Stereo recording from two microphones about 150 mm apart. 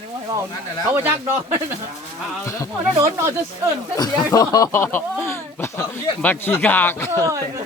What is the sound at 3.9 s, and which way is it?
Speech, 25° left (ahead or behind).